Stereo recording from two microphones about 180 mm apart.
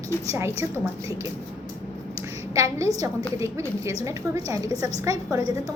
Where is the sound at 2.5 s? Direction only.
15° right (ahead or behind).